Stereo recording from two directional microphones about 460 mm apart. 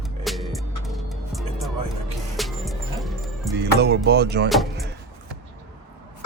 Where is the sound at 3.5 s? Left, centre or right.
Right.